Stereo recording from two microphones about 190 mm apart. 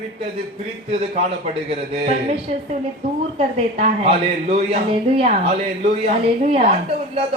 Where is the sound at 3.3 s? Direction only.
35° right (ahead or behind).